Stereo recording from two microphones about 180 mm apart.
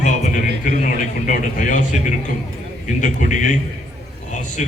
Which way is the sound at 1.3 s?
45° left (ahead or behind).